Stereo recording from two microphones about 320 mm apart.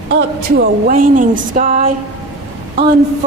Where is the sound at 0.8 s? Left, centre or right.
Right.